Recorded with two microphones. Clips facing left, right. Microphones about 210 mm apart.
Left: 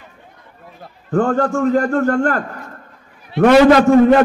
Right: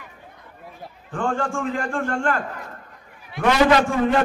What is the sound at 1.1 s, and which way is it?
A man's voice, 40° left (ahead or behind).